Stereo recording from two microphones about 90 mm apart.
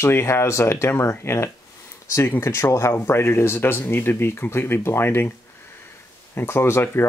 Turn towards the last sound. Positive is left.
turn(degrees=25)  # may be behind; listen again after turning